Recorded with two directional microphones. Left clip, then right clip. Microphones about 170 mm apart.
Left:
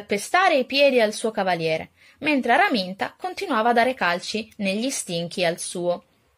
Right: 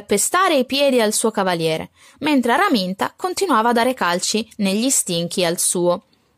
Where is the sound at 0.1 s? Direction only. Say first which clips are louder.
Right 3 dB; 50° right (ahead or behind).